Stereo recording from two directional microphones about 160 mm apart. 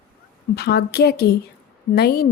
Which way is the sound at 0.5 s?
90° left.